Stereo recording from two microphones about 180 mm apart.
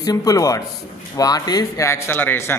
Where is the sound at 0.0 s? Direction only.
20° left (ahead or behind).